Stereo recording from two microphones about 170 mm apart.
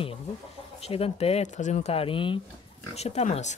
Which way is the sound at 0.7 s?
35° left (ahead or behind).